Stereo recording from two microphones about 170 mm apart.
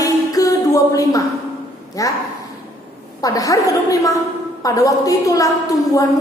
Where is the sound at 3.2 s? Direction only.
20° left (ahead or behind).